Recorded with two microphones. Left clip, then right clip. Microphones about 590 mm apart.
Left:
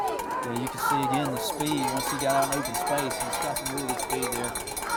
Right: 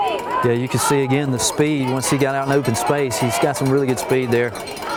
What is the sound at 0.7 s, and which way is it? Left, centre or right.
Speech, right.